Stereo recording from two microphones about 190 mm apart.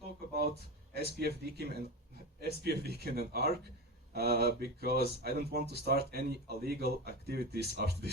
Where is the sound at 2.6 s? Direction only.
55° right (ahead or behind).